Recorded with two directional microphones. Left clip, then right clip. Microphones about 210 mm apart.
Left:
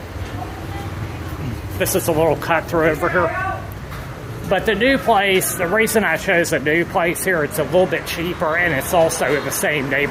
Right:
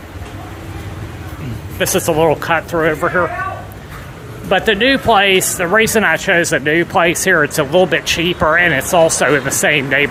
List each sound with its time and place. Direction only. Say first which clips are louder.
1.8 s speech: right 4 dB; 15° right (ahead or behind)
4.4 s speech: right 4 dB; 15° right (ahead or behind)